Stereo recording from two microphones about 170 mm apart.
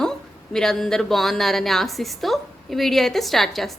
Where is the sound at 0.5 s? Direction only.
5° left (ahead or behind).